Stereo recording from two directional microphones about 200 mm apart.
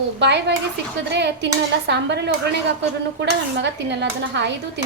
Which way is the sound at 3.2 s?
60° right (ahead or behind).